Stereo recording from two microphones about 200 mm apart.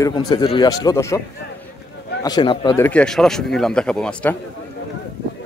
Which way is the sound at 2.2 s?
20° left (ahead or behind).